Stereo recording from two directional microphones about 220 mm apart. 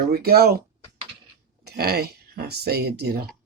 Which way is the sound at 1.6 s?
45° right (ahead or behind).